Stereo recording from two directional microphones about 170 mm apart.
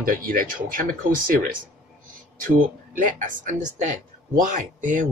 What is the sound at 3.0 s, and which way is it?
Speech, 50° right (ahead or behind).